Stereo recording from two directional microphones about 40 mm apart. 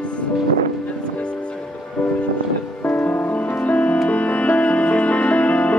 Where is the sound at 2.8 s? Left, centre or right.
Left.